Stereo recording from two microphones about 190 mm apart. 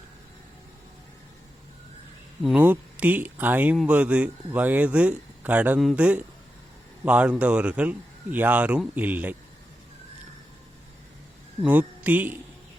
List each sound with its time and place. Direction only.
2.4 s speech: 5° right (ahead or behind)
11.6 s speech: 5° right (ahead or behind)